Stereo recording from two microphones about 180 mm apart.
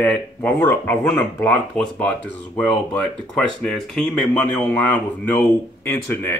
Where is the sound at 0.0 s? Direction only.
10° left (ahead or behind).